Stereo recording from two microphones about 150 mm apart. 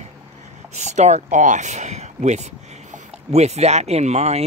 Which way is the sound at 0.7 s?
50° right (ahead or behind).